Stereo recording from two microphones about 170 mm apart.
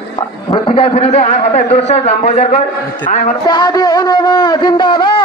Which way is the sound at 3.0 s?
50° left (ahead or behind).